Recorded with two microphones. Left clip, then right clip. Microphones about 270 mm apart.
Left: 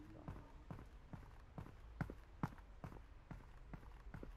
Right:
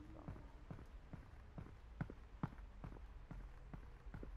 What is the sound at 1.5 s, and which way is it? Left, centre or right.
Walk, centre.